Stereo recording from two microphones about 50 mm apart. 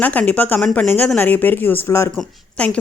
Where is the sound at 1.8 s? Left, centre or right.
Left.